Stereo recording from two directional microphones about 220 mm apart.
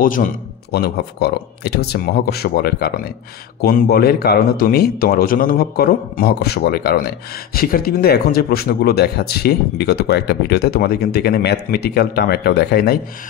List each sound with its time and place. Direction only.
0.0 s speech: 40° left (ahead or behind)